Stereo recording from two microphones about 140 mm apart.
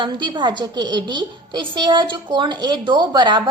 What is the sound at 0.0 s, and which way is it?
A woman's voice, 35° right (ahead or behind).